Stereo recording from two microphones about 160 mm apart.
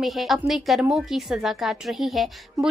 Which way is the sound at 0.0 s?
Centre (ahead or behind).